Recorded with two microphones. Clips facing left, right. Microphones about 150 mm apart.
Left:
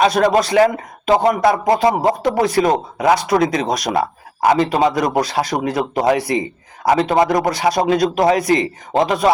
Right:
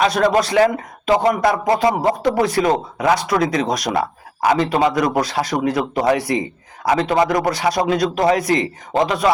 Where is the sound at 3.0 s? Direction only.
35° left (ahead or behind).